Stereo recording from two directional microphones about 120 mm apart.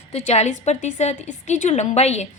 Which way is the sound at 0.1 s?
65° left (ahead or behind).